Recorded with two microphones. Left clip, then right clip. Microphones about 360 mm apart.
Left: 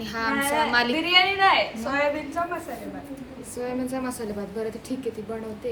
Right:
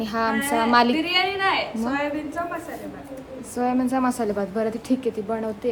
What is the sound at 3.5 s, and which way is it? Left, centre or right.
Speech, centre.